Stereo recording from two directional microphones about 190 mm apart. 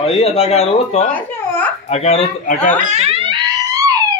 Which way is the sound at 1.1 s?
10° left (ahead or behind).